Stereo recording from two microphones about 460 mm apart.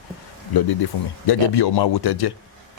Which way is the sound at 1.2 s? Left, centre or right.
Left.